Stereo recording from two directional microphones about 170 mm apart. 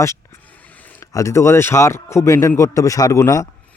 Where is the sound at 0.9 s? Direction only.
15° left (ahead or behind).